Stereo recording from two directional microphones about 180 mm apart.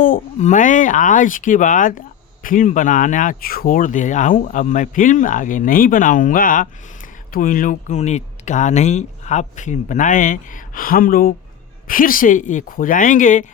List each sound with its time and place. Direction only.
0.0 s speech: 45° left (ahead or behind)